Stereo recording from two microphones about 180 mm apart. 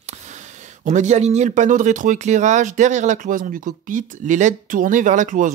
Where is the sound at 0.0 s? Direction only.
40° right (ahead or behind).